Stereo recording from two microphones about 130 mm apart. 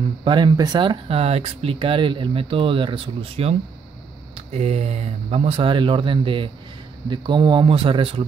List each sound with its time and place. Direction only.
0.2 s speech: 40° right (ahead or behind)